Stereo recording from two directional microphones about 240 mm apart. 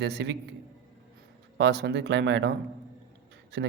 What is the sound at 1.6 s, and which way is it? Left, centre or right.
Speech, right.